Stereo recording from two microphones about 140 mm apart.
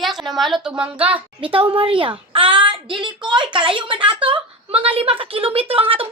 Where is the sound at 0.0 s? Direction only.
Centre (ahead or behind).